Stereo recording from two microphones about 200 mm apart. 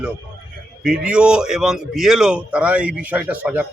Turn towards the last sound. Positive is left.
turn(degrees=-5)  # may be behind; listen again after turning